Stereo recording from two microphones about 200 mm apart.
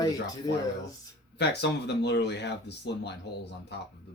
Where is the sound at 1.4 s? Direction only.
55° left (ahead or behind).